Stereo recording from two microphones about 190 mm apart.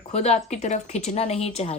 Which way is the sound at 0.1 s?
35° left (ahead or behind).